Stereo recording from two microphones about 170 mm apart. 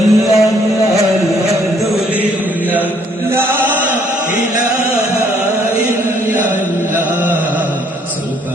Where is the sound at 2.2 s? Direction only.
10° right (ahead or behind).